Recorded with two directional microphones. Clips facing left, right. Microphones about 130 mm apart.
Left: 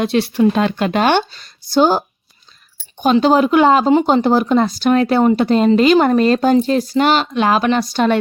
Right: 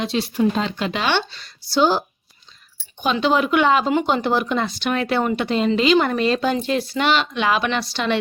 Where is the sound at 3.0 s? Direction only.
40° left (ahead or behind).